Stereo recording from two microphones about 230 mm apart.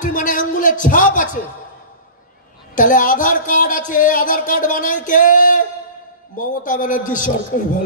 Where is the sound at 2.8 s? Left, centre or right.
Left.